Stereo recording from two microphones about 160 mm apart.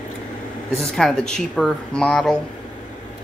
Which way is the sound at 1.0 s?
5° left (ahead or behind).